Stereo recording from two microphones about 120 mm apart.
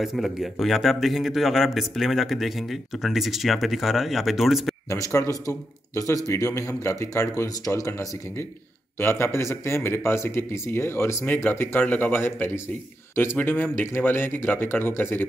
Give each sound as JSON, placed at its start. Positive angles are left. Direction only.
{"t": 0.0, "sound": "speech", "side_deg": 0}
{"t": 4.8, "sound": "speech", "side_deg": 25}